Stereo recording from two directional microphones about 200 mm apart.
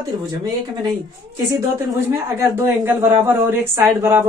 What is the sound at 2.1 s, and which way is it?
Speech, 10° right (ahead or behind).